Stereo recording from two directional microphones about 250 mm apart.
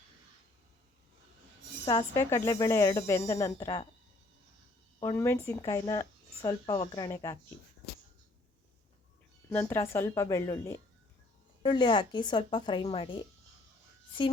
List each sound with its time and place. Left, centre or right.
1.8 s speech: centre
4.9 s speech: centre
9.5 s speech: centre